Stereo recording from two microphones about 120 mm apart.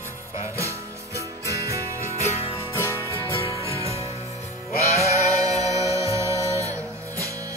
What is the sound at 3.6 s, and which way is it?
Music, 25° right (ahead or behind).